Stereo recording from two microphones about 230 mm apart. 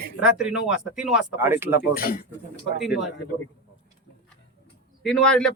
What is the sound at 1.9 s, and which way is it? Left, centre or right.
Speech, left.